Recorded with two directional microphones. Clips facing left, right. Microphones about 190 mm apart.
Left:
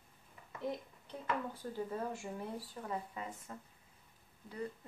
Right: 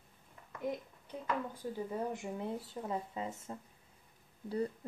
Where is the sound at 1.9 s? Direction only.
20° right (ahead or behind).